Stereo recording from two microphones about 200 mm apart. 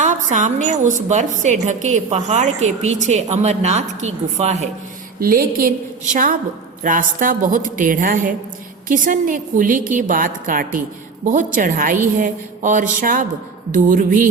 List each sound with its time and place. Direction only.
0.0 s a woman's voice: 40° right (ahead or behind)
5.2 s a woman's voice: 45° right (ahead or behind)